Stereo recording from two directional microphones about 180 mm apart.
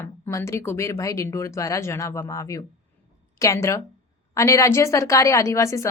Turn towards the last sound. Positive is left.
turn(degrees=15)  # may be behind; listen again after turning